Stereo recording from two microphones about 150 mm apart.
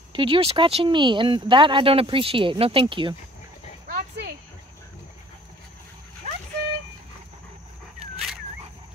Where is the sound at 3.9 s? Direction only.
80° right.